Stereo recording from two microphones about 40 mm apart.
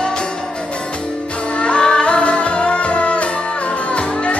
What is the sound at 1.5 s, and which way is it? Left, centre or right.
Music, left.